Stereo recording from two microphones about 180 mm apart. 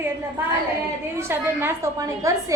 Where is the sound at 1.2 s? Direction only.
15° right (ahead or behind).